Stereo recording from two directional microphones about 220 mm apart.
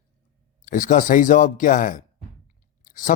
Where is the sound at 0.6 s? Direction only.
35° left (ahead or behind).